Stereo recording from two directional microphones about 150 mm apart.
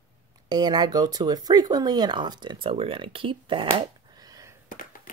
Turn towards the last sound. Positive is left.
turn(degrees=65)  # may be behind; listen again after turning